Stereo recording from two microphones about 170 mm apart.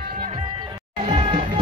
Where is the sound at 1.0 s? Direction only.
30° right (ahead or behind).